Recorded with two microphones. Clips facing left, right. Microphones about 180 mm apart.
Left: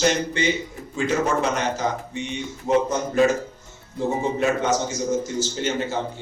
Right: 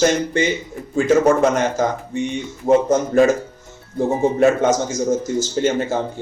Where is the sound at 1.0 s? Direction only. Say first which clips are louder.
Right 8 dB; 50° right (ahead or behind).